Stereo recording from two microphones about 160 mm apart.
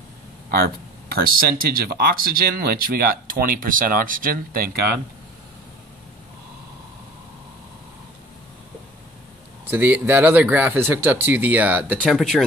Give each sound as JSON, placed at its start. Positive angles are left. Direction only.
{"t": 0.5, "sound": "speech", "side_deg": -70}
{"t": 9.7, "sound": "speech", "side_deg": -10}
{"t": 12.0, "sound": "speech", "side_deg": 0}